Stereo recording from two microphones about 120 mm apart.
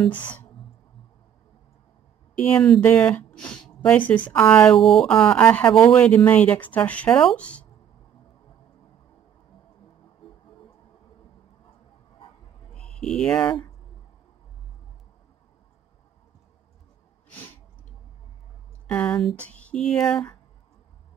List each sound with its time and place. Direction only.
0.0 s speech: 10° left (ahead or behind)
2.3 s speech: 10° left (ahead or behind)
12.7 s speech: 10° left (ahead or behind)
17.3 s sneeze: 15° left (ahead or behind)
18.9 s speech: 10° left (ahead or behind)